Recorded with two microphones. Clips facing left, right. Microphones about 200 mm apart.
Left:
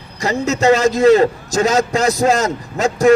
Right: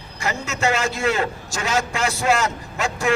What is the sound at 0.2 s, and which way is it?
A man's voice, 35° left (ahead or behind).